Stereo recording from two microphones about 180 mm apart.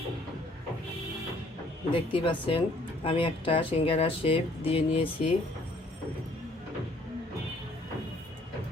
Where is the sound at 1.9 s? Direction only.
30° left (ahead or behind).